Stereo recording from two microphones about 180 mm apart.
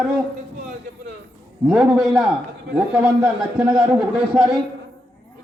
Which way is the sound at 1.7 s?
Centre (ahead or behind).